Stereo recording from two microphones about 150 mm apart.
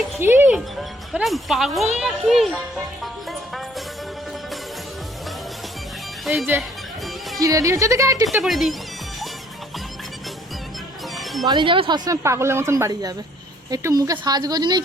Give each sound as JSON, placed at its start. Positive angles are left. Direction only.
{"t": 0.2, "sound": "speech", "side_deg": -15}
{"t": 0.5, "sound": "speech", "side_deg": 0}
{"t": 3.0, "sound": "music", "side_deg": 0}
{"t": 6.3, "sound": "speech", "side_deg": 0}
{"t": 6.6, "sound": "music", "side_deg": 0}
{"t": 7.3, "sound": "speech", "side_deg": -20}
{"t": 8.4, "sound": "speech", "side_deg": 0}
{"t": 11.1, "sound": "music", "side_deg": 0}
{"t": 11.4, "sound": "speech", "side_deg": -35}